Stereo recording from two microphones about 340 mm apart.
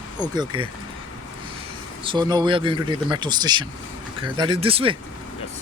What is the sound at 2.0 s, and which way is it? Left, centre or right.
Speech, centre.